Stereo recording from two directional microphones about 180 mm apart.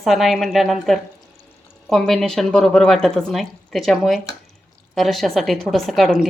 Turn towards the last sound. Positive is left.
turn(degrees=0)  # may be behind; listen again after turning